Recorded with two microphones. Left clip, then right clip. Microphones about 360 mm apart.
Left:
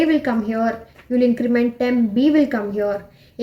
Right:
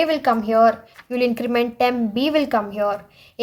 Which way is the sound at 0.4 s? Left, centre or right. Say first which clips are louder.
Right 7 dB; right.